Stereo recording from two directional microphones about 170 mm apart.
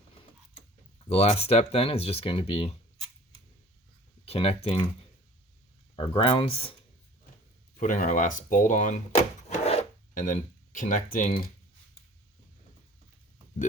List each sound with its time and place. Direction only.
1.1 s speech: 35° left (ahead or behind)
4.3 s speech: 35° left (ahead or behind)
6.0 s speech: 30° left (ahead or behind)
7.8 s speech: 50° left (ahead or behind)
9.5 s filing: 40° left (ahead or behind); by 11.5 s 55° left (ahead or behind)